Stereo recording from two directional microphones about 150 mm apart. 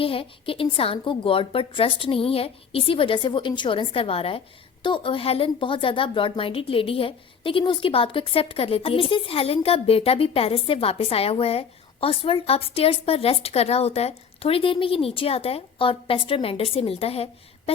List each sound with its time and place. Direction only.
0.0 s a woman's voice: 35° left (ahead or behind)